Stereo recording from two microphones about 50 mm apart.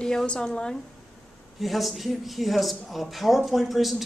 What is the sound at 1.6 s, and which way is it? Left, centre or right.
Speech, centre.